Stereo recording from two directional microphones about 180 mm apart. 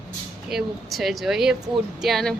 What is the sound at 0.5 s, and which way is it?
Speech, centre (ahead or behind).